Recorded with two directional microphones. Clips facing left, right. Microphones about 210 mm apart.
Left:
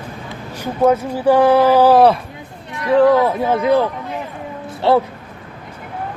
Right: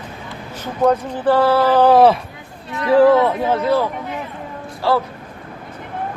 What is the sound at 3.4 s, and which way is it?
Speech, 10° left (ahead or behind).